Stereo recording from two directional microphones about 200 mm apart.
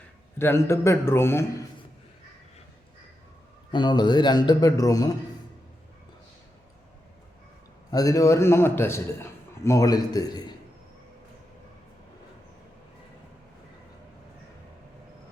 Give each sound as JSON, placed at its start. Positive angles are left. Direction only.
{"t": 0.3, "sound": "a man's voice", "side_deg": 10}
{"t": 3.7, "sound": "a man's voice", "side_deg": 20}
{"t": 7.9, "sound": "a man's voice", "side_deg": 15}